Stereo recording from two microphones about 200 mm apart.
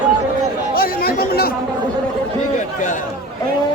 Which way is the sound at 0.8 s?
45° left (ahead or behind).